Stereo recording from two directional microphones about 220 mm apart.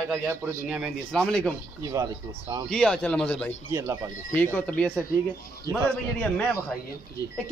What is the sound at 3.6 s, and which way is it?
Speech, 10° right (ahead or behind).